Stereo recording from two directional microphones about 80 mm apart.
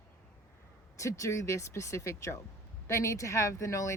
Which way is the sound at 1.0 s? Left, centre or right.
Left.